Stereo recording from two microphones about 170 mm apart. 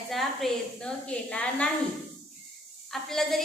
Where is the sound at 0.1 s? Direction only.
Centre (ahead or behind).